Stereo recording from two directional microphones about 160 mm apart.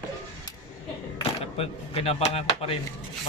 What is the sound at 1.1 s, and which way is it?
Speech, 40° left (ahead or behind).